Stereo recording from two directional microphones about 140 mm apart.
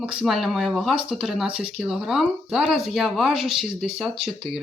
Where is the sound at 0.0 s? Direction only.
5° right (ahead or behind).